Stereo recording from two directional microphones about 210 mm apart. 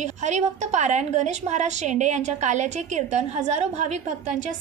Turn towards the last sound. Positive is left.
turn(degrees=-35)  # may be behind; listen again after turning